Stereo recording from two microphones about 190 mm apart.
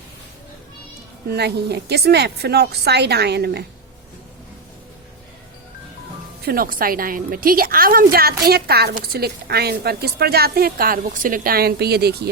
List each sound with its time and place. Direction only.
1.3 s a woman's voice: 60° right (ahead or behind)
6.4 s a woman's voice: 50° right (ahead or behind)